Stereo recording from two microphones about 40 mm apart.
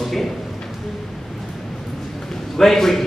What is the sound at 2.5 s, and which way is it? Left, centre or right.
Speech, centre.